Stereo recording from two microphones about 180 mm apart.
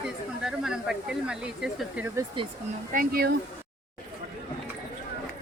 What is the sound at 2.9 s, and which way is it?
Speech, 50° right (ahead or behind).